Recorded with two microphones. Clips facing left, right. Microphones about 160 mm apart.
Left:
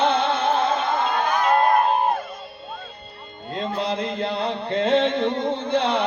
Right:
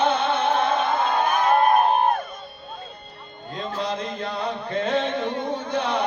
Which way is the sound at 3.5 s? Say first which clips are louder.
Left 3 dB; 25° left (ahead or behind).